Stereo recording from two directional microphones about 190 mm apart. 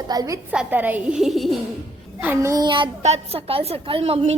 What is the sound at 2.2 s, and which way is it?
A woman's voice, 10° right (ahead or behind).